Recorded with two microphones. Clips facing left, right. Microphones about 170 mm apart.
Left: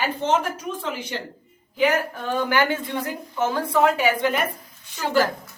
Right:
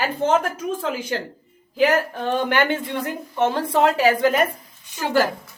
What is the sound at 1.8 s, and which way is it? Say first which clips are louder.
A woman's voice: right 3 dB; 35° right (ahead or behind).